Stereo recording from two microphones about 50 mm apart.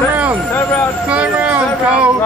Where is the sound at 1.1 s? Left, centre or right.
Right.